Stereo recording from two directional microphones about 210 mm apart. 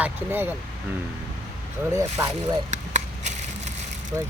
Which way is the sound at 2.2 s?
10° right (ahead or behind).